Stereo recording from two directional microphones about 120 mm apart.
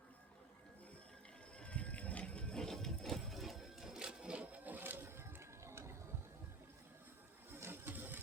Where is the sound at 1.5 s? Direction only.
10° left (ahead or behind); by 6.0 s 20° right (ahead or behind).